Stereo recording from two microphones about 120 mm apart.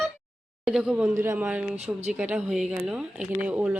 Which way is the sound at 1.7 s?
65° right (ahead or behind).